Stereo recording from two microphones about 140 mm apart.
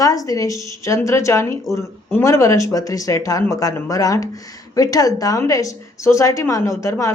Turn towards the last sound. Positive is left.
turn(degrees=20)  # may be behind; listen again after turning